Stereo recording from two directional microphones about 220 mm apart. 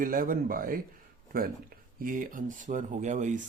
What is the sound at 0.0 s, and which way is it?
Speech, 40° right (ahead or behind).